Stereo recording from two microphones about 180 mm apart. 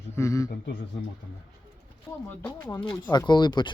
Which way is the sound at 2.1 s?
15° left (ahead or behind).